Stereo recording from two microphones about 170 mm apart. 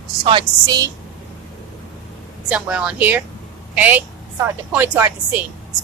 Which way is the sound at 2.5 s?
5° right (ahead or behind).